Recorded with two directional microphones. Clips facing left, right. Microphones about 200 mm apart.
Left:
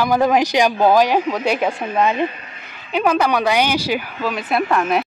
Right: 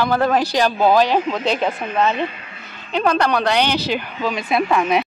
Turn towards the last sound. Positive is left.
turn(degrees=0)  # may be behind; listen again after turning